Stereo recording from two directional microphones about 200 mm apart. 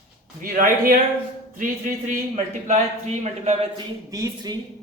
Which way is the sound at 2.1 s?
40° right (ahead or behind).